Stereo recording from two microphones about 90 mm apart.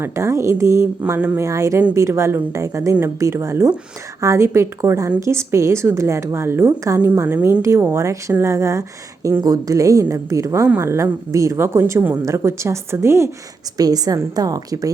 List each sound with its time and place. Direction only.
0.0 s a woman's voice: 30° right (ahead or behind)
13.7 s a woman's voice: 45° right (ahead or behind)